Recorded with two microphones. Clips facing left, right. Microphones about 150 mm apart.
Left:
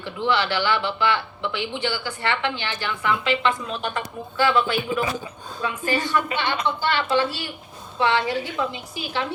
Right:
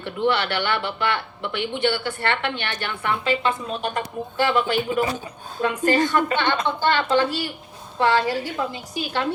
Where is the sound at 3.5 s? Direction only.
35° right (ahead or behind).